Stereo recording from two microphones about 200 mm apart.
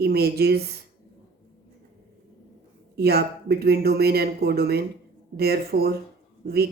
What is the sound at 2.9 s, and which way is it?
Speech, 55° right (ahead or behind).